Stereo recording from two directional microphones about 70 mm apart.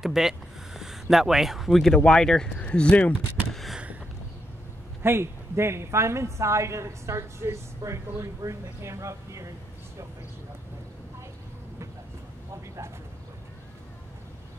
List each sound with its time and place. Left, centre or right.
0.0 s a sound: centre
1.1 s speech: centre
5.0 s a woman's voice: right